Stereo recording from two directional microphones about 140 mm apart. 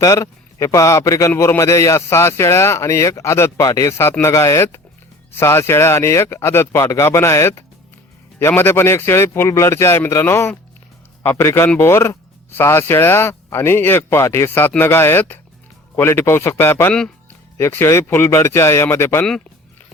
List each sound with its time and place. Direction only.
0.0 s a man's voice: 20° left (ahead or behind)